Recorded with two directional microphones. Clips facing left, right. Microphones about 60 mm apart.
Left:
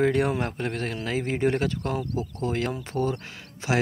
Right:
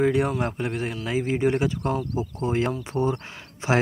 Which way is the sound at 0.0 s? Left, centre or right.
Centre.